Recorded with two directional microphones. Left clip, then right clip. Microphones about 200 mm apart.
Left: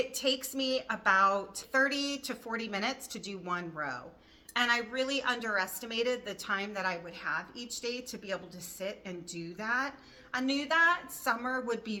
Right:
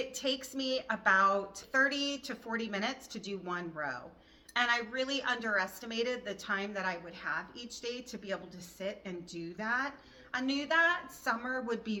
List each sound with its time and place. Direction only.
0.1 s a woman's voice: 20° left (ahead or behind)